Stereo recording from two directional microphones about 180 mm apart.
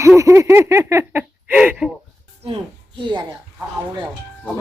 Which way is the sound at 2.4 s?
30° right (ahead or behind).